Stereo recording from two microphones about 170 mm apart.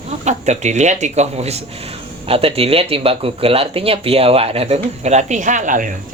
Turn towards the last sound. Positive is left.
turn(degrees=-50)  # may be behind; listen again after turning